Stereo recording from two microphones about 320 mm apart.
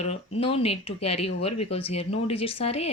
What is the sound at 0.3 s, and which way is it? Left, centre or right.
Speech, centre.